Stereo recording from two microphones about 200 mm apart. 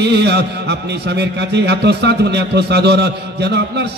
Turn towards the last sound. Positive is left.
turn(degrees=-55)  # may be behind; listen again after turning